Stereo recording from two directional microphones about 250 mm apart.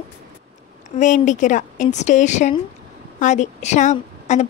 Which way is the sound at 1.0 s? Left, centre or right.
Left.